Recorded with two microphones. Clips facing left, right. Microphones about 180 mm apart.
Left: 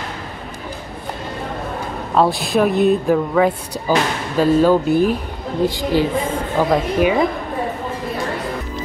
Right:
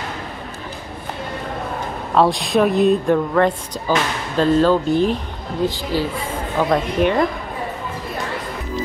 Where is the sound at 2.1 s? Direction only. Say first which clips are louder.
Even; centre (ahead or behind).